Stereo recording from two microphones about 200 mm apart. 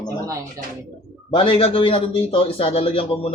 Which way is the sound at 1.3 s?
25° left (ahead or behind).